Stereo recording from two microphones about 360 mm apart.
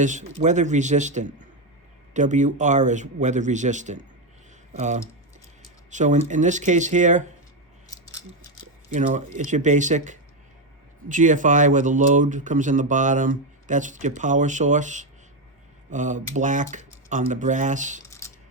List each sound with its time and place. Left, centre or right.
0.0 s speech: centre
7.9 s scissors: centre
8.9 s speech: centre